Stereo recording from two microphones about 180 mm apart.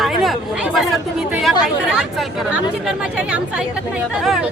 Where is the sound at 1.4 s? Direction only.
Centre (ahead or behind).